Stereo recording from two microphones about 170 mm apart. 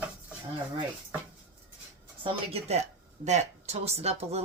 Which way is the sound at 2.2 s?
35° right (ahead or behind).